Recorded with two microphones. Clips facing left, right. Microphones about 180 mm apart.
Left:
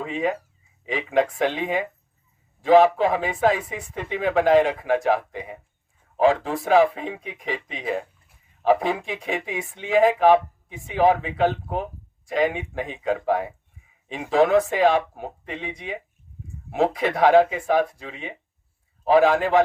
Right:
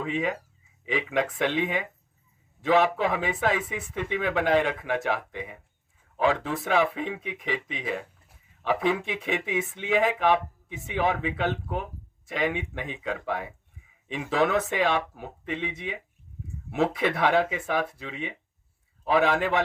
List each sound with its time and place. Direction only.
0.0 s speech: 40° left (ahead or behind)
16.7 s speech: 40° left (ahead or behind)